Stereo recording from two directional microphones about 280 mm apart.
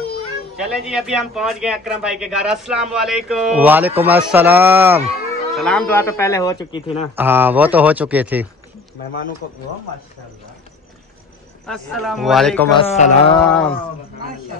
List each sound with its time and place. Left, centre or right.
0.6 s a man's voice: centre
7.2 s a man's voice: centre
11.6 s a man's voice: centre
12.8 s speech: left
13.4 s a man's voice: centre